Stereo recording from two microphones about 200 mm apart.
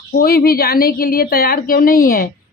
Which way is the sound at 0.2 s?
50° left (ahead or behind).